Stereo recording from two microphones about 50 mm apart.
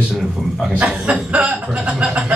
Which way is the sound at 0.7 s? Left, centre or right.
Right.